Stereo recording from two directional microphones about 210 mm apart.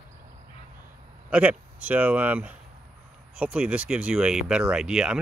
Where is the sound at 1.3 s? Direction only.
5° right (ahead or behind).